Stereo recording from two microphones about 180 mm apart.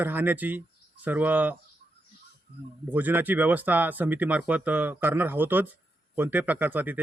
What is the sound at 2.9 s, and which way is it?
Speech, 10° right (ahead or behind).